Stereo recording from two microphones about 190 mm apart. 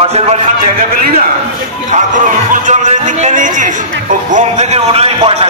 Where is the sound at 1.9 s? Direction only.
40° right (ahead or behind).